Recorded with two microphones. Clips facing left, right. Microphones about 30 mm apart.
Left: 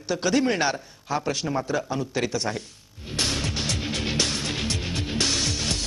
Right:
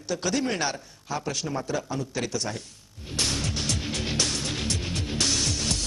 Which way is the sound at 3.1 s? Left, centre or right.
Centre.